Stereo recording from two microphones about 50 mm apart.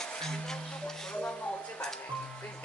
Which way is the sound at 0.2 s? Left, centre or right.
Centre.